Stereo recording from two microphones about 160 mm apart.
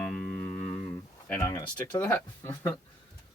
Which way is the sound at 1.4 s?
25° left (ahead or behind).